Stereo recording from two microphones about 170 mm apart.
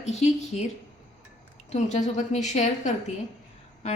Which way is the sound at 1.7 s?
45° left (ahead or behind).